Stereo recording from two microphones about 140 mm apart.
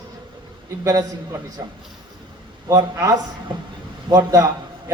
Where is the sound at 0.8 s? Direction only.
25° right (ahead or behind).